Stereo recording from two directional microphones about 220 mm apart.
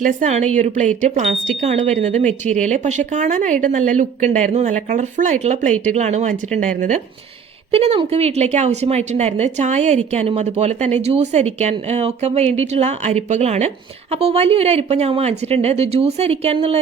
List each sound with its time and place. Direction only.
0.0 s a woman's voice: 35° right (ahead or behind)